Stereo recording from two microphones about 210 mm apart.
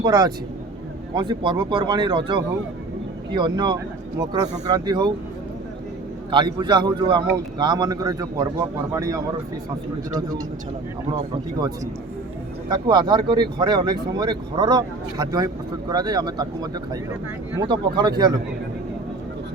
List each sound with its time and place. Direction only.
0.0 s speech: 20° right (ahead or behind)
6.3 s speech: 20° right (ahead or behind)
12.6 s speech: 20° right (ahead or behind)
17.7 s speech: 20° right (ahead or behind)